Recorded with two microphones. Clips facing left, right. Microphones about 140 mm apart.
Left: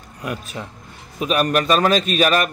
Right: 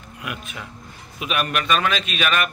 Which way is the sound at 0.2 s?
35° left (ahead or behind).